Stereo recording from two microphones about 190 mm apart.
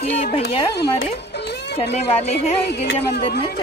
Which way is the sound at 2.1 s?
35° left (ahead or behind).